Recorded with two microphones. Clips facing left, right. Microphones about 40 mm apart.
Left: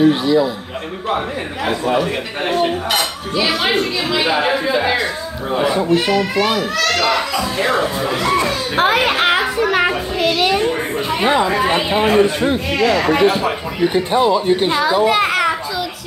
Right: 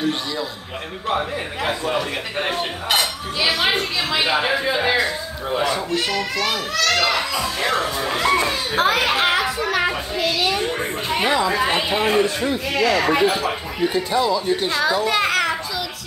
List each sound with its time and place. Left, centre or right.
0.0 s a child's voice: centre
1.7 s speech: centre
5.5 s a child's voice: centre
8.7 s child singing: left
11.2 s speech: left
11.6 s a child's voice: centre
12.0 s a man's voice: left
14.7 s a child's voice: centre
15.0 s children playing: centre